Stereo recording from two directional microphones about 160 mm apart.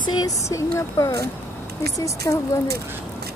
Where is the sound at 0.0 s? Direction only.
20° left (ahead or behind).